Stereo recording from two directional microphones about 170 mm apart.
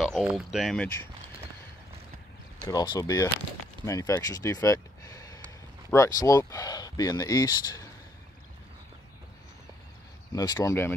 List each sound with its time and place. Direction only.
0.0 s speech: centre (ahead or behind)
2.6 s speech: 25° left (ahead or behind)
10.3 s speech: 20° left (ahead or behind)